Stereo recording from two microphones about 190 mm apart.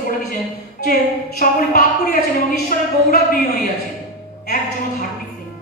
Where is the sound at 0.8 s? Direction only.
50° left (ahead or behind).